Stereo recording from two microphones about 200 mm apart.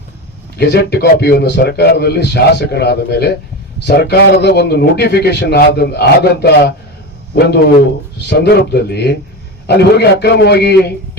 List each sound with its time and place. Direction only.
0.6 s a man's voice: 55° left (ahead or behind)